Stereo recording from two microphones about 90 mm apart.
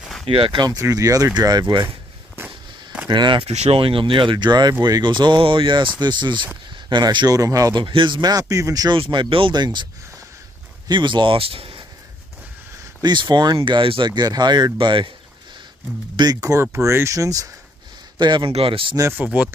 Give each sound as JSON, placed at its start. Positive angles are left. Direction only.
{"t": 0.0, "sound": "a sound", "side_deg": 5}
{"t": 0.3, "sound": "speech", "side_deg": -65}
{"t": 0.7, "sound": "speech", "side_deg": -40}
{"t": 2.3, "sound": "firecracker", "side_deg": -15}
{"t": 3.1, "sound": "speech", "side_deg": -60}
{"t": 5.9, "sound": "speech", "side_deg": -55}
{"t": 7.7, "sound": "speech", "side_deg": -65}
{"t": 8.9, "sound": "speech", "side_deg": -65}
{"t": 10.9, "sound": "speech", "side_deg": -60}
{"t": 13.0, "sound": "speech", "side_deg": -55}
{"t": 13.6, "sound": "speech", "side_deg": -80}
{"t": 16.2, "sound": "speech", "side_deg": -45}
{"t": 18.2, "sound": "speech", "side_deg": -60}
{"t": 19.1, "sound": "speech", "side_deg": -15}